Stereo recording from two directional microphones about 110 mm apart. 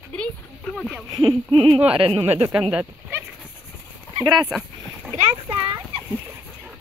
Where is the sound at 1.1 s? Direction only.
45° right (ahead or behind).